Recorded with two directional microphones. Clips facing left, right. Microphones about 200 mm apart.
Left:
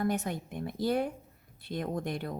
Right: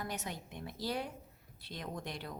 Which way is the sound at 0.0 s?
55° left (ahead or behind).